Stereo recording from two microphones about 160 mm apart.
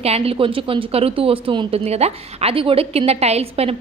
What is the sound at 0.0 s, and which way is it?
Speech, 40° right (ahead or behind).